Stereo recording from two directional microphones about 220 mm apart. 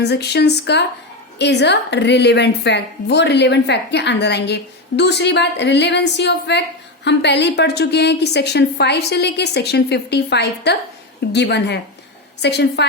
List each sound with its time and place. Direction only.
0.0 s a woman's voice: 50° left (ahead or behind)